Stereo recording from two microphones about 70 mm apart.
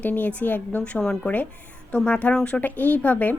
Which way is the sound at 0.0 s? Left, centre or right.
Left.